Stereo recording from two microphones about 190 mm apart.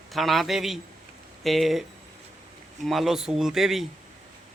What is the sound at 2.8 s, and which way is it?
A man's voice, centre (ahead or behind).